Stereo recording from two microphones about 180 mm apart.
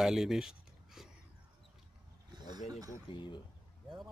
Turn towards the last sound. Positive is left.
turn(degrees=25)  # may be behind; listen again after turning